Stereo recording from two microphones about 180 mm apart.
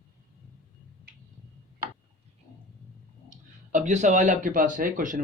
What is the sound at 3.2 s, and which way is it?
Speech, 40° right (ahead or behind).